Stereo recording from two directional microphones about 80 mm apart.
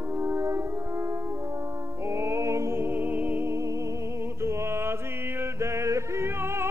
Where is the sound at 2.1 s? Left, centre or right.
Right.